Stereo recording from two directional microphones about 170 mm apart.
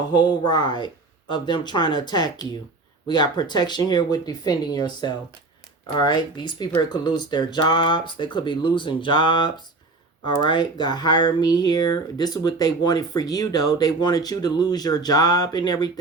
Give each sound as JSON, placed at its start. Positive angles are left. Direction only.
{"t": 0.1, "sound": "speech", "side_deg": 25}